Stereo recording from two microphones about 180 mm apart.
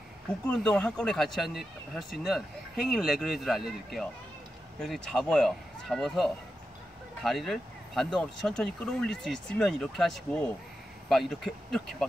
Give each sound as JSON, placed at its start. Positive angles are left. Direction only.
{"t": 0.5, "sound": "speech", "side_deg": 5}